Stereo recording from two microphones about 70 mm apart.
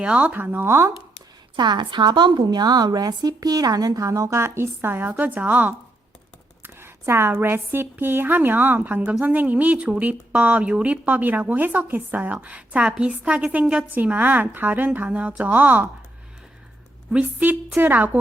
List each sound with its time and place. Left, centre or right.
0.0 s a woman's voice: centre; by 0.9 s right
1.5 s a woman's voice: right
6.6 s a woman's voice: right
17.2 s a woman's voice: right